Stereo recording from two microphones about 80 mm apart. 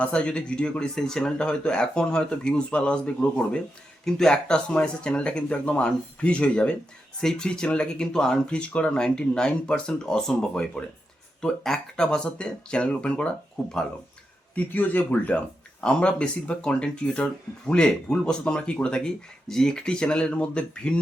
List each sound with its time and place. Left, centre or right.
0.0 s speech: centre
14.5 s speech: left